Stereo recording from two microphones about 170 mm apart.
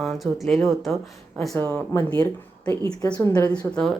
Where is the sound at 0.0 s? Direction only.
Centre (ahead or behind).